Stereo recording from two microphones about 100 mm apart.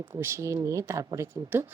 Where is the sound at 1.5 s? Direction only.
20° right (ahead or behind).